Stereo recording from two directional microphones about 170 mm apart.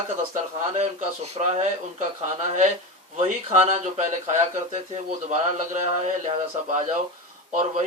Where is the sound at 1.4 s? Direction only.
40° right (ahead or behind).